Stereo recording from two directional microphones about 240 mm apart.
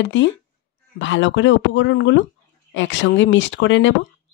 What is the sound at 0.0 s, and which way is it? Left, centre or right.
Speech, left.